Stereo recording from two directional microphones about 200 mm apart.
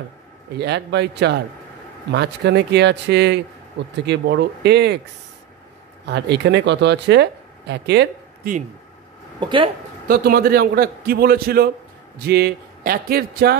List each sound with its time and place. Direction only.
0.6 s speech: 60° right (ahead or behind)
6.0 s speech: 55° right (ahead or behind)
9.4 s speech: 25° right (ahead or behind)
10.0 s a man's voice: 50° right (ahead or behind)